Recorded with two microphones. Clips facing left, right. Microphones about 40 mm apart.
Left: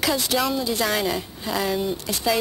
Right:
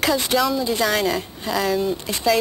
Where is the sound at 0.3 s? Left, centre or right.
Centre.